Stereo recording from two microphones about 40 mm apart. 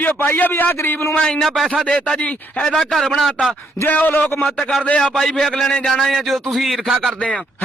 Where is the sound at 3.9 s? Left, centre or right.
Left.